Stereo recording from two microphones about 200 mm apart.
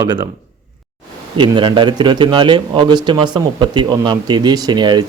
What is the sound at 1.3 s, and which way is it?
Speech, 25° right (ahead or behind).